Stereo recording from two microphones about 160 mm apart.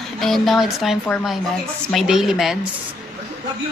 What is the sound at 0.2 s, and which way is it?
Speech, centre (ahead or behind).